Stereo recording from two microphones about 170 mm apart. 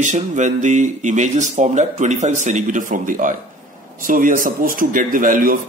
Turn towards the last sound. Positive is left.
turn(degrees=-55)  # may be behind; listen again after turning